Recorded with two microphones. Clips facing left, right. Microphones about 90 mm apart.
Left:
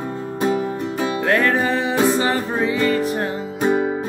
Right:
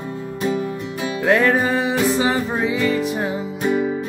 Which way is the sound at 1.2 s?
15° right (ahead or behind).